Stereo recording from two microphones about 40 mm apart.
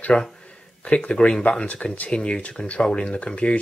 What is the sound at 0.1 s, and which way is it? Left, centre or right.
Speech, left.